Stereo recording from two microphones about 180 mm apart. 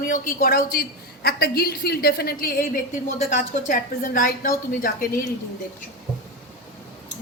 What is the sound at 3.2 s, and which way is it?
A man's voice, 40° left (ahead or behind).